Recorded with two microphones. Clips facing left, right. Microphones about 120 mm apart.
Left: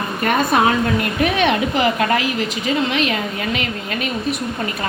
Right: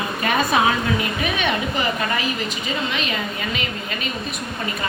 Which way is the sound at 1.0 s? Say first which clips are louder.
Left 6 dB; 70° left (ahead or behind).